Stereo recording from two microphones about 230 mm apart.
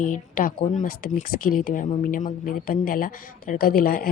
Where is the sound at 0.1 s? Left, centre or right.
Left.